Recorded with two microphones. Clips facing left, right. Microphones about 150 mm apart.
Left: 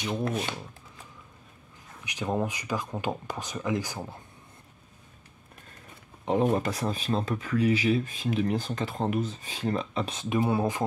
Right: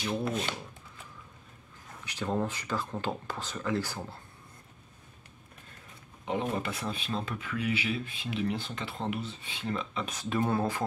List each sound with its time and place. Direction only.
2.0 s speech: 15° left (ahead or behind)
6.2 s speech: 40° left (ahead or behind)
10.1 s speech: 15° left (ahead or behind)